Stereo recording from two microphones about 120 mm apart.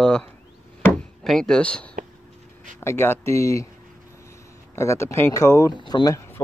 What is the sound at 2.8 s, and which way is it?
Speech, 20° left (ahead or behind).